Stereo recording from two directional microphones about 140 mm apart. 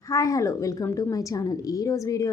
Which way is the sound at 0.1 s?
20° left (ahead or behind).